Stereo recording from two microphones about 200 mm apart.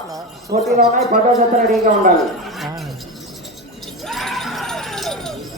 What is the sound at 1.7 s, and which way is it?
Speech, 40° right (ahead or behind).